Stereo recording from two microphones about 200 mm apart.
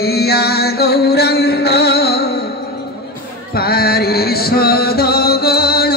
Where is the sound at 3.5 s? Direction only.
50° left (ahead or behind).